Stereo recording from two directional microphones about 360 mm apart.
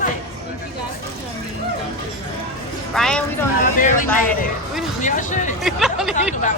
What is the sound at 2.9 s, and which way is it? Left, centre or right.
Speech, centre.